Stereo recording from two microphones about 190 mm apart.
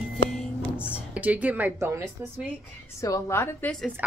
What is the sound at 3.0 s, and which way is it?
Speech, 15° left (ahead or behind).